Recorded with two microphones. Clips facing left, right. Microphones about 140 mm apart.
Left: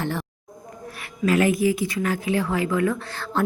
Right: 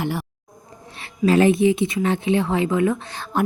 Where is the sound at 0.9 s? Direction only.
25° right (ahead or behind).